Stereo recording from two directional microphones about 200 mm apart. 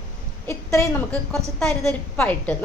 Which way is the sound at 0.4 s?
15° left (ahead or behind).